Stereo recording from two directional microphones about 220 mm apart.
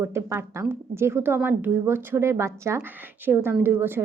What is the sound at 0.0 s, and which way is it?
Speech, 10° right (ahead or behind).